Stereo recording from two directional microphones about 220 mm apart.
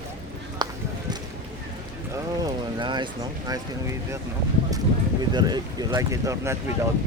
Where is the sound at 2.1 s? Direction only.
20° right (ahead or behind).